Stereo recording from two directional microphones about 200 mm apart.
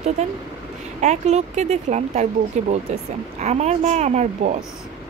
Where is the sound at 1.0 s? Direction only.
35° right (ahead or behind).